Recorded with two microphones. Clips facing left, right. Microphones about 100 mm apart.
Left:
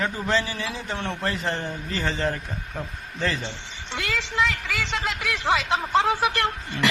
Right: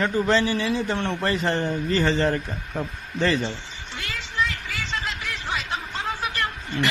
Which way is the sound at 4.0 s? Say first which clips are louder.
Left 3 dB; 90° left.